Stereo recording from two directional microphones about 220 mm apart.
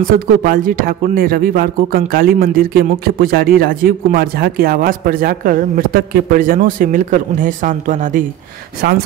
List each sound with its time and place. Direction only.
0.5 s speech: 40° right (ahead or behind)
8.8 s speech: 50° right (ahead or behind)